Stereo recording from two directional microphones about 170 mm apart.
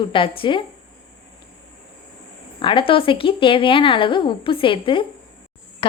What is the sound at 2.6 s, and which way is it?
Speech, 30° left (ahead or behind).